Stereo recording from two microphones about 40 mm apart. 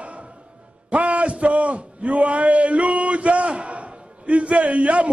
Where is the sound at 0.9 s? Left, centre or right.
Right.